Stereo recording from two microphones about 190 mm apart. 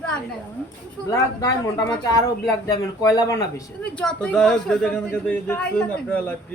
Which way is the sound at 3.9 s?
5° left (ahead or behind).